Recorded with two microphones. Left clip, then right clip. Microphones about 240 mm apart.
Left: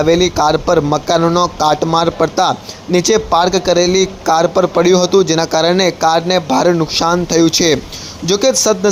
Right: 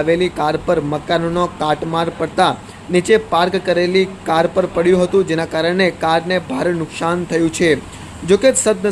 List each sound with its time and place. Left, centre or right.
0.0 s speech: left